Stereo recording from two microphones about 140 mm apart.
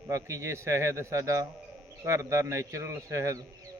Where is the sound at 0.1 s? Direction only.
20° right (ahead or behind).